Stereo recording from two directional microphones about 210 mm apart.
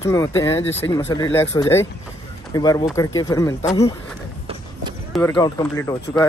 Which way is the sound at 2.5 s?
15° left (ahead or behind).